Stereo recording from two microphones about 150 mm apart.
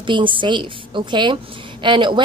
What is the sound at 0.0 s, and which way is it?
A woman's voice, 35° right (ahead or behind).